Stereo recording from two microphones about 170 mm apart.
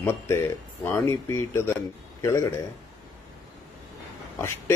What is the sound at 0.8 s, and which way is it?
Speech, 15° left (ahead or behind).